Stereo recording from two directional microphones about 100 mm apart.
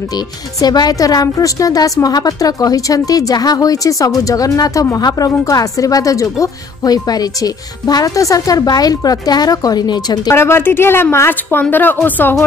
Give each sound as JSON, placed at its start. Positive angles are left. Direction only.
{"t": 0.6, "sound": "a woman's voice", "side_deg": 40}
{"t": 10.3, "sound": "a woman's voice", "side_deg": 25}